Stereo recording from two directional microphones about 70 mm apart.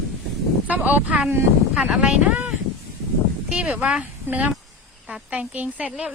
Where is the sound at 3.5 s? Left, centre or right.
Centre.